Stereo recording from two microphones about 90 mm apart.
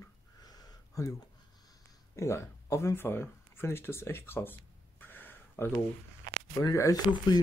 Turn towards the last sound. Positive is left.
turn(degrees=40)  # may be behind; listen again after turning